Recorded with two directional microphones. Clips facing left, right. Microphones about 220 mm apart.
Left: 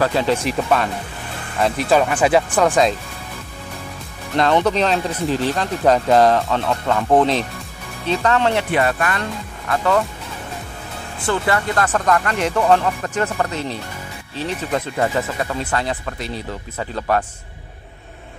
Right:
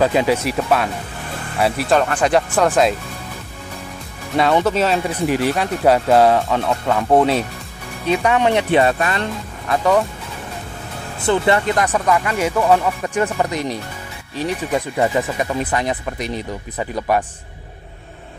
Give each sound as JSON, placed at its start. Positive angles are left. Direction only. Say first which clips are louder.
{"t": 0.0, "sound": "speech", "louder": "right 2 dB", "side_deg": -15}
{"t": 4.4, "sound": "speech", "louder": "right 1 dB", "side_deg": -5}
{"t": 11.1, "sound": "speech", "louder": "right 4 dB", "side_deg": -20}